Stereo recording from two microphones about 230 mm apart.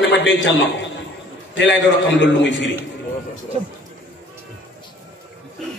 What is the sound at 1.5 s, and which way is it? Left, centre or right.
A man's voice, left.